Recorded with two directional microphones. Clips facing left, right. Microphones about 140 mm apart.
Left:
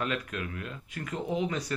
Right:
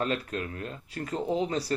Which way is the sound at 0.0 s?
35° right (ahead or behind).